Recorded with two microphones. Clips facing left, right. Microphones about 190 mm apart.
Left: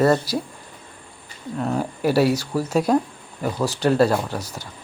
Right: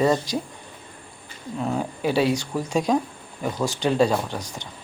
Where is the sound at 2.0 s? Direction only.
10° left (ahead or behind).